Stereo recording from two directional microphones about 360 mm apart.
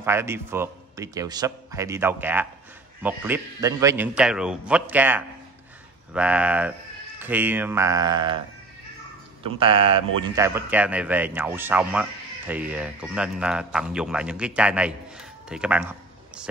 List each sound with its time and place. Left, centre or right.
0.0 s a man's voice: centre
9.4 s a man's voice: centre